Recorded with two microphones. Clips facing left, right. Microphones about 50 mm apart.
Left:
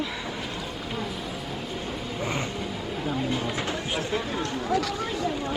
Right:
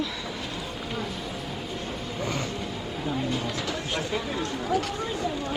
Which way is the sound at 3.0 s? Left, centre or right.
Centre.